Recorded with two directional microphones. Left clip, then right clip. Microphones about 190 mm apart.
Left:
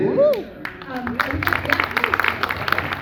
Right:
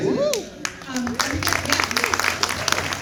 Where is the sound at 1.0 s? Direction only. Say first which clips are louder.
Left 2 dB; 60° right (ahead or behind).